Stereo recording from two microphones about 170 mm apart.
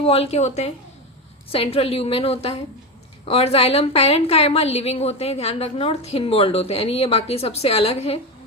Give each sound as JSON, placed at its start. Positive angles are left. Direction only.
{"t": 0.0, "sound": "a woman's voice", "side_deg": 35}